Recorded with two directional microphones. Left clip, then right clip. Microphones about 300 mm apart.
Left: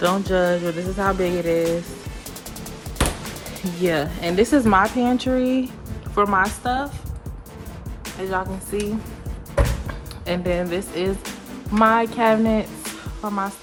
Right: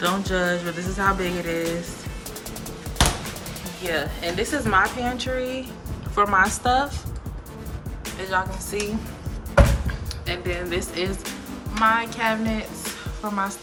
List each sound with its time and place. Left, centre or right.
0.0 s music: centre
3.8 s music: centre
6.1 s a woman's voice: centre
8.0 s speech: centre
10.2 s music: centre